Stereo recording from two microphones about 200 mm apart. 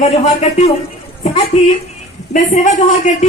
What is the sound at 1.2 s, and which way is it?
A woman's voice, 30° left (ahead or behind).